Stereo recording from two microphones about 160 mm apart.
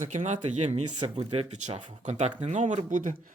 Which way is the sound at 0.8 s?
30° right (ahead or behind).